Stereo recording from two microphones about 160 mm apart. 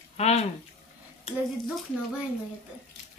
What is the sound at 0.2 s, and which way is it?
Speech, 40° left (ahead or behind).